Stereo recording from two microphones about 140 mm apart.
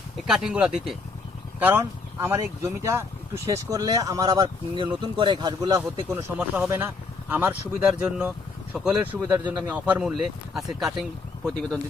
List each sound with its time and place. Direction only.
0.2 s speech: 5° right (ahead or behind); by 6.1 s 30° right (ahead or behind)
6.1 s speech: 15° right (ahead or behind)